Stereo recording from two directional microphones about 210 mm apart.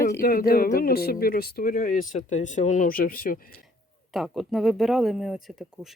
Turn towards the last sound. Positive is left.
turn(degrees=0)  # may be behind; listen again after turning